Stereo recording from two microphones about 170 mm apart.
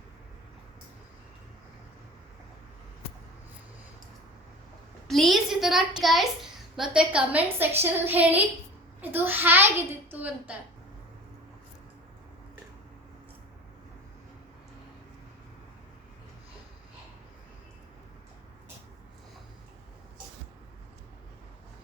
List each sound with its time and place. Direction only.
5.0 s a child's voice: centre (ahead or behind)